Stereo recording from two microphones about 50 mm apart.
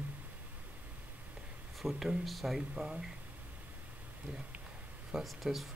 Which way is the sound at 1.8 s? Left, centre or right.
Centre.